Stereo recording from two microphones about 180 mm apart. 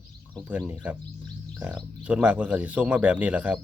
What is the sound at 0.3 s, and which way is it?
Speech, 5° right (ahead or behind).